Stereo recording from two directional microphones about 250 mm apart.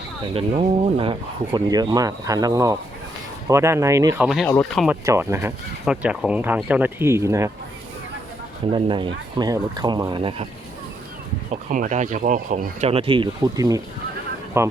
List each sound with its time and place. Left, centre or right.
0.3 s speech: right; by 4.9 s centre
5.0 s speech: centre
8.7 s speech: centre
11.7 s speech: right; by 14.7 s centre